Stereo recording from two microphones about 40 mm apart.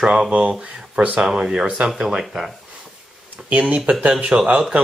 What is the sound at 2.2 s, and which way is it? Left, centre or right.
Speech, centre.